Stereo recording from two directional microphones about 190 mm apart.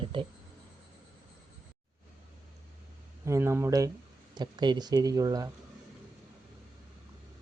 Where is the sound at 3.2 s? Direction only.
15° right (ahead or behind).